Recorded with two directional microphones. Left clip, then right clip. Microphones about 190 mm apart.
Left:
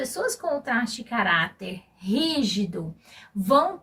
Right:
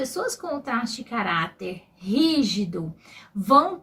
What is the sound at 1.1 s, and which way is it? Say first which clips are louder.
A woman's voice: left 3 dB; 15° left (ahead or behind).